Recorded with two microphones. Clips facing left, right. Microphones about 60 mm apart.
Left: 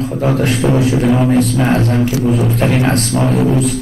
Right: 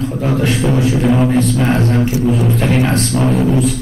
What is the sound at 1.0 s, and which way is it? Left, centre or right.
Speech, centre.